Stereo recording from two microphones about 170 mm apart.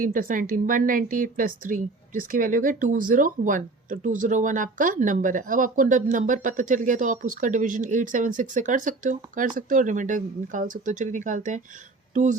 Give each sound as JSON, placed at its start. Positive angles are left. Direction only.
{"t": 0.0, "sound": "a woman's voice", "side_deg": -55}